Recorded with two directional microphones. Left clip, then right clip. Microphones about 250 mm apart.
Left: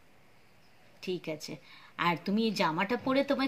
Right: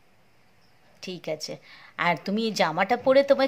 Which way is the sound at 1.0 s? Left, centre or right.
Centre.